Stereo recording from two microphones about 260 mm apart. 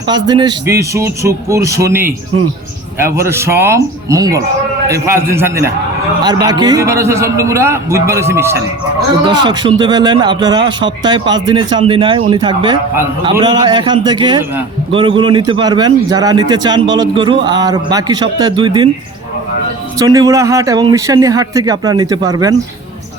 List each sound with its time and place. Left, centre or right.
0.1 s speech: centre
20.0 s speech: centre